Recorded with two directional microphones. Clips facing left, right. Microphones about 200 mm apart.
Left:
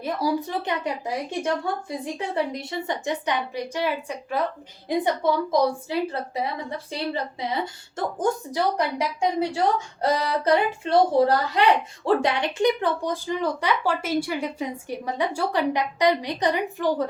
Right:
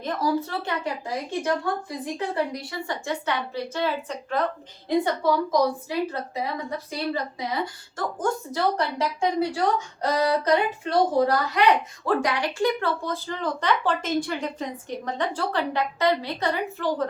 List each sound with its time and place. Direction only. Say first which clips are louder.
0.0 s a woman's voice: even; 10° left (ahead or behind)
4.9 s a woman's voice: even; 20° left (ahead or behind)